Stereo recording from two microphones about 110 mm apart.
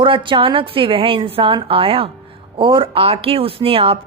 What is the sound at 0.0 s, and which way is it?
A woman's voice, 50° right (ahead or behind).